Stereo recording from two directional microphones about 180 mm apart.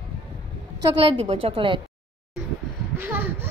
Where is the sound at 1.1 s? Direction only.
30° right (ahead or behind).